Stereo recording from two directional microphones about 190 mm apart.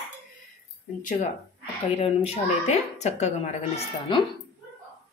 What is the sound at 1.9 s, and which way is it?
A woman's voice, 35° left (ahead or behind).